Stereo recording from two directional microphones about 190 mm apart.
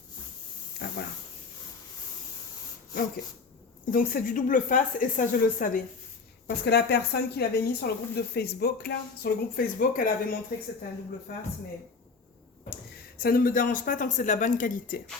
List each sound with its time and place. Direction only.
0.8 s a sound: 60° left (ahead or behind)
3.9 s speech: 45° left (ahead or behind)
6.7 s speech: 60° left (ahead or behind)
13.1 s speech: 50° left (ahead or behind)